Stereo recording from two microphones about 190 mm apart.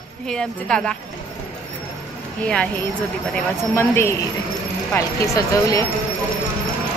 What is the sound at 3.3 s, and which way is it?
Speech, 15° left (ahead or behind).